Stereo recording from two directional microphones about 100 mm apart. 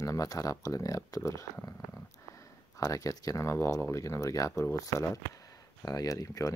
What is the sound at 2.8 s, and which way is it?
Speech, 35° left (ahead or behind).